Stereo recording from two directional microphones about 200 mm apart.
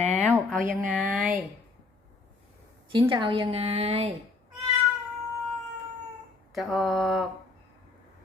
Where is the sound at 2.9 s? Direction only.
25° right (ahead or behind).